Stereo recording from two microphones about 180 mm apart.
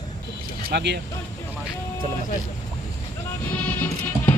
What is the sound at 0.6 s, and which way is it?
Speech, 70° right (ahead or behind).